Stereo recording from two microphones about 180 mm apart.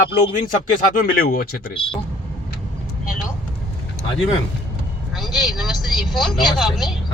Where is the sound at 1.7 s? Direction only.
30° left (ahead or behind).